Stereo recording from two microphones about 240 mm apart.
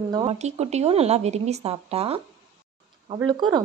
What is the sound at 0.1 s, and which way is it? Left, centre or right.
Speech, right.